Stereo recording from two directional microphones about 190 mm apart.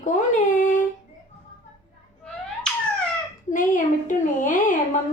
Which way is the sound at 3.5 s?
45° left (ahead or behind).